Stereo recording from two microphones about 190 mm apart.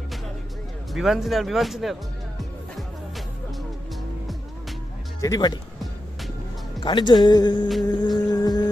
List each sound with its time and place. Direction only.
0.9 s speech: centre (ahead or behind)
5.2 s speech: 20° left (ahead or behind)
6.8 s speech: 25° left (ahead or behind)
7.8 s music: 20° left (ahead or behind)